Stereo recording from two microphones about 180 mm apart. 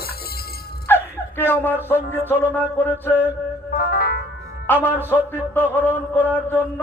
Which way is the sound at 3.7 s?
55° left (ahead or behind).